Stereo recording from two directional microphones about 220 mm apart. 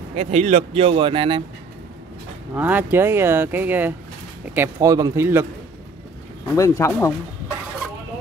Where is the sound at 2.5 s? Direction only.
10° right (ahead or behind).